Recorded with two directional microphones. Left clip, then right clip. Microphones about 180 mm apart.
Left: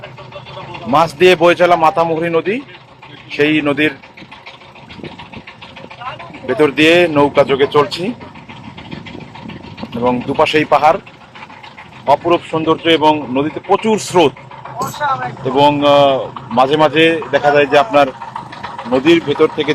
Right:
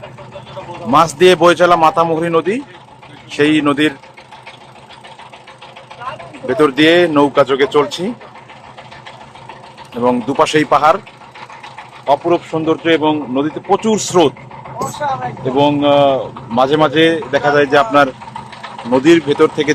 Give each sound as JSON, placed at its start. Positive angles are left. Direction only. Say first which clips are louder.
{"t": 0.9, "sound": "speech", "louder": "right 1 dB", "side_deg": -10}
{"t": 6.5, "sound": "speech", "louder": "even", "side_deg": -10}
{"t": 10.0, "sound": "speech", "louder": "right 1 dB", "side_deg": -15}
{"t": 12.2, "sound": "speech", "louder": "left 1 dB", "side_deg": -5}
{"t": 14.8, "sound": "speech", "louder": "left 1 dB", "side_deg": 30}
{"t": 15.5, "sound": "speech", "louder": "left 2 dB", "side_deg": -10}